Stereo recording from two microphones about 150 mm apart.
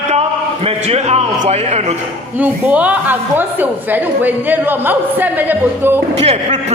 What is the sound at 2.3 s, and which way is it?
A woman's voice, 10° right (ahead or behind).